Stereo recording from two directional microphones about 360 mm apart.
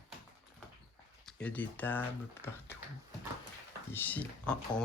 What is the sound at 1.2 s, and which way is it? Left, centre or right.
Speech, centre.